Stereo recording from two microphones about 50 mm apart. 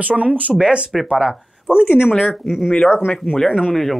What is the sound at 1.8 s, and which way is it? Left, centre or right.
Speech, left.